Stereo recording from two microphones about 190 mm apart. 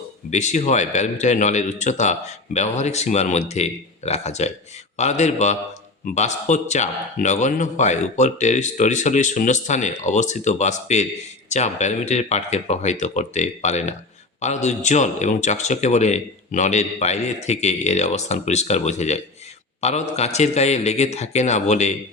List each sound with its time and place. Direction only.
0.3 s a man's voice: 40° left (ahead or behind)